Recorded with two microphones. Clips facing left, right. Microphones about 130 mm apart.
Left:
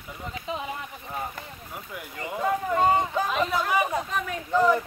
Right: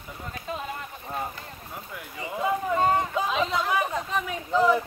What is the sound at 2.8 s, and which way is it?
Speech, 10° left (ahead or behind).